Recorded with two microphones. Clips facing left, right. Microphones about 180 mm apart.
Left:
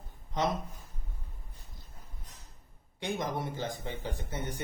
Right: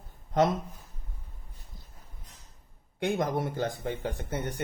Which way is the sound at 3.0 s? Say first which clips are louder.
Right 6 dB; 55° right (ahead or behind).